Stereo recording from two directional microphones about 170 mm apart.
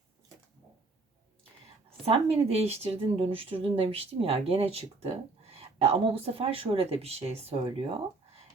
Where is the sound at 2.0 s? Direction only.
35° right (ahead or behind).